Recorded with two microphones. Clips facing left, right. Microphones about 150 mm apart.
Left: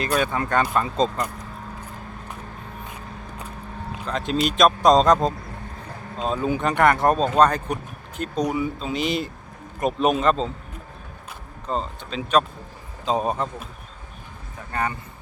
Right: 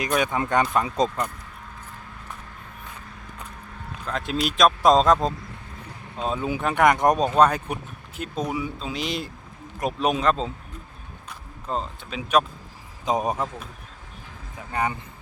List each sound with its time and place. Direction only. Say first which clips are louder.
0.2 s speech: right 1 dB; 20° right (ahead or behind)
4.0 s speech: left 3 dB; 5° right (ahead or behind)
14.7 s speech: even; 15° right (ahead or behind)